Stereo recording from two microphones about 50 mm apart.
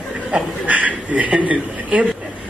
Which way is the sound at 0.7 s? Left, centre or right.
Right.